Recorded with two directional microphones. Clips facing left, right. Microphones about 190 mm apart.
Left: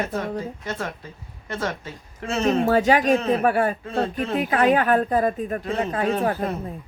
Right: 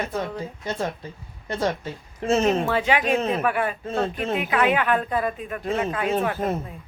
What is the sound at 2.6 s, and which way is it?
A woman's voice, 40° left (ahead or behind).